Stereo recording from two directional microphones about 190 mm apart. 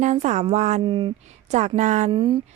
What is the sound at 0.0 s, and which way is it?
Speech, 40° right (ahead or behind).